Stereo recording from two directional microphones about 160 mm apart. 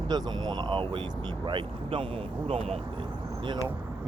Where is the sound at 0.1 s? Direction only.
25° right (ahead or behind).